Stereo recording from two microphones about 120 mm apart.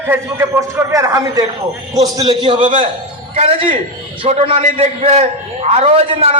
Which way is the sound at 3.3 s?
55° right (ahead or behind).